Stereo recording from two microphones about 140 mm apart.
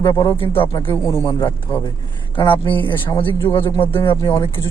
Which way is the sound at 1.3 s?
30° left (ahead or behind).